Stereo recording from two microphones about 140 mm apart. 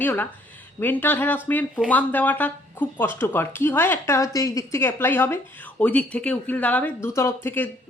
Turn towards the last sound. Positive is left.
turn(degrees=15)  # may be behind; listen again after turning